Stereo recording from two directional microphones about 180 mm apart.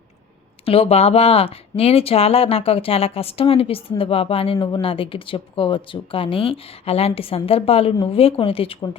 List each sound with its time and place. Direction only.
0.6 s speech: 30° left (ahead or behind)